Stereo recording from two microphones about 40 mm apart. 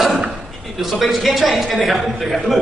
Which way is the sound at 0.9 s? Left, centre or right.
Centre.